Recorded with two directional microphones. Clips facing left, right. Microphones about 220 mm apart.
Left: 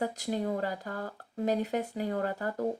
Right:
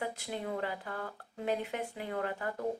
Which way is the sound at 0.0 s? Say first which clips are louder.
Left 6 dB; 40° left (ahead or behind).